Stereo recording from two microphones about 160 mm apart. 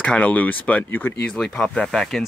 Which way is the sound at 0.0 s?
5° left (ahead or behind).